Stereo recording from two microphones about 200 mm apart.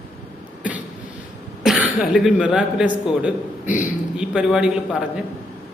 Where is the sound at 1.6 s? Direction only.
Centre (ahead or behind).